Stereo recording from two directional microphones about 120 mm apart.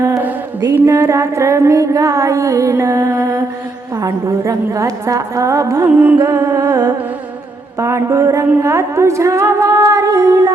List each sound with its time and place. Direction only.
0.8 s mantra: 25° right (ahead or behind)
6.1 s humming: 30° right (ahead or behind)
7.8 s mantra: 25° right (ahead or behind)